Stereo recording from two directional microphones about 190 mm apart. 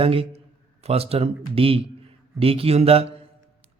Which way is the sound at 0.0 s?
30° right (ahead or behind).